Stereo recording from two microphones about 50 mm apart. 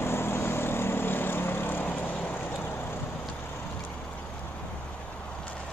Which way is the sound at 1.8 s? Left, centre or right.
Left.